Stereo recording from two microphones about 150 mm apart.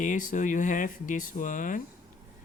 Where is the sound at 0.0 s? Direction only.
60° left (ahead or behind).